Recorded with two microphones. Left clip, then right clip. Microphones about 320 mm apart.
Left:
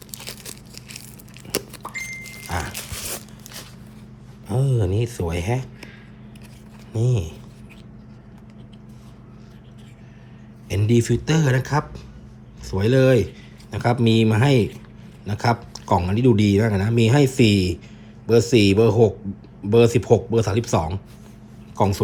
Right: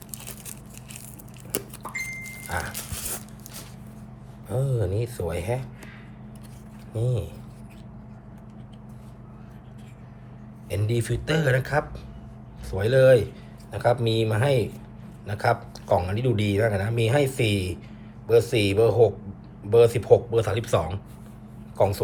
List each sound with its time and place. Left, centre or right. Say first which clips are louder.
2.7 s dog: left 4 dB; centre
4.4 s speech: left 3 dB; left
6.9 s speech: left 3 dB; left
10.7 s speech: left 7 dB; left